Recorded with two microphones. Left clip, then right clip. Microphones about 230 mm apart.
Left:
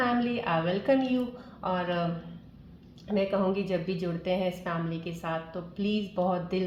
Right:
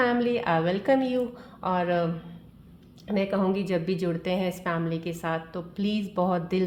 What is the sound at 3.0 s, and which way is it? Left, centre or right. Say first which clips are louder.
A woman's voice: right 1 dB; right.